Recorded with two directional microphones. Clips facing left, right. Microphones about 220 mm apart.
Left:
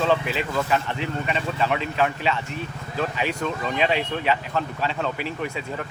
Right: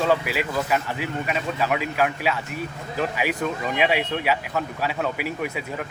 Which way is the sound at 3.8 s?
10° right (ahead or behind).